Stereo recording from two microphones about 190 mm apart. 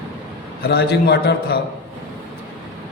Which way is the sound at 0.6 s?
60° left (ahead or behind).